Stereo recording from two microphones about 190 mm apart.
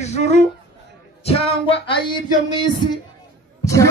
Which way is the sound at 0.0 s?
35° left (ahead or behind).